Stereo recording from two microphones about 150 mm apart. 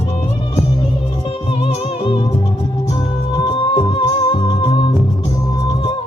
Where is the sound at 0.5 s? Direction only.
30° left (ahead or behind).